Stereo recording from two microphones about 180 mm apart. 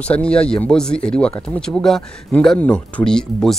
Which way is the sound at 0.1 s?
5° left (ahead or behind).